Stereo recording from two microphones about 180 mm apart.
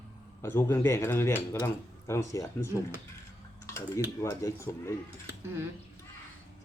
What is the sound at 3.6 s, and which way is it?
Typing, 15° left (ahead or behind).